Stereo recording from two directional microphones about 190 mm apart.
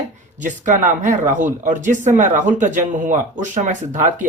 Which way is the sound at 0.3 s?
40° right (ahead or behind).